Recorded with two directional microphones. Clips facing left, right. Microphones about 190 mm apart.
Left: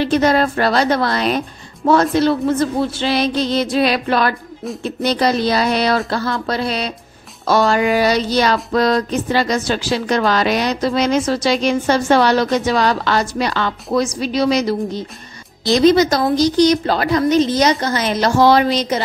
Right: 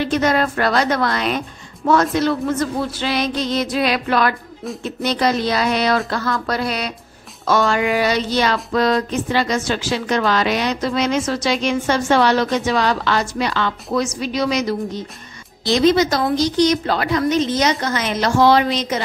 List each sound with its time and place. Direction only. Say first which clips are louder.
0.0 s a woman's voice: left 3 dB; 30° left (ahead or behind)